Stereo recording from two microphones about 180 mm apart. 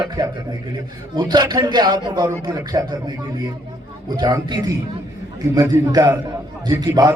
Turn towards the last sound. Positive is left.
turn(degrees=-20)  # may be behind; listen again after turning